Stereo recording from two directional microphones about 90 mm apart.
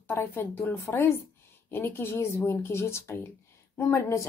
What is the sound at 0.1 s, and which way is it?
A woman's voice, 25° left (ahead or behind).